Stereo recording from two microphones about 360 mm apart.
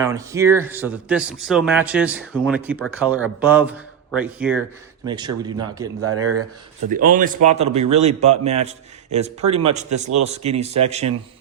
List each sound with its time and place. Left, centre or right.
0.0 s a man's voice: centre
6.0 s speech: right
6.9 s a man's voice: right
9.7 s a man's voice: centre